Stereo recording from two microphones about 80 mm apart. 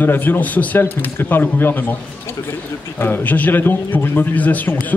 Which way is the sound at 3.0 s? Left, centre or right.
Left.